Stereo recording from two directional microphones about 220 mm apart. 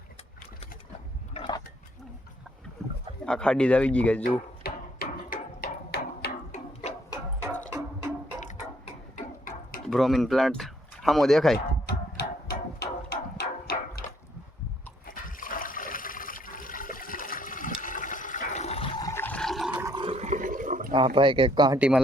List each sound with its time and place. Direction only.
1.3 s a sound: 20° left (ahead or behind)
3.2 s speech: 5° left (ahead or behind)
4.2 s a sound: 40° left (ahead or behind)
9.1 s a sound: 40° left (ahead or behind)
9.8 s speech: centre (ahead or behind)
11.5 s music: 45° left (ahead or behind)
15.0 s toilet flush: 40° left (ahead or behind); by 19.7 s centre (ahead or behind)
19.7 s toilet flush: 15° right (ahead or behind); by 20.9 s 35° right (ahead or behind)
20.9 s speech: 25° right (ahead or behind)
21.8 s speech: 5° right (ahead or behind)